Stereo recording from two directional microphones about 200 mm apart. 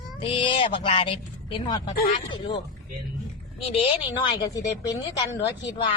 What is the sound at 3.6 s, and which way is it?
A woman's voice, 30° left (ahead or behind).